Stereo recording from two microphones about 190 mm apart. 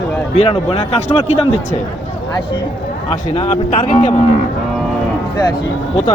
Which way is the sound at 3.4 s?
30° left (ahead or behind).